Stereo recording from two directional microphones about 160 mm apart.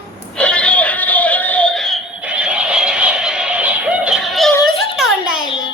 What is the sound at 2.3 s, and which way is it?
Music, 5° right (ahead or behind).